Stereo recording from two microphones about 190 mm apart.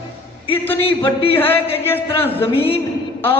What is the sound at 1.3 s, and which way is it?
Speech, 10° left (ahead or behind).